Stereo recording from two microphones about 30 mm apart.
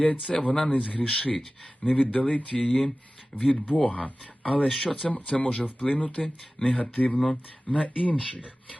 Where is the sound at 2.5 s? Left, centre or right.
Left.